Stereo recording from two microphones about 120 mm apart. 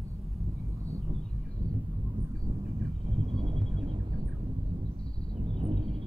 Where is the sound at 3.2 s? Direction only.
45° right (ahead or behind).